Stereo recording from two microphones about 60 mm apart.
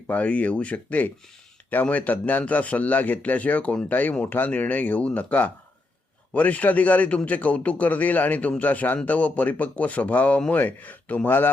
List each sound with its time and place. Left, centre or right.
0.1 s a man's voice: left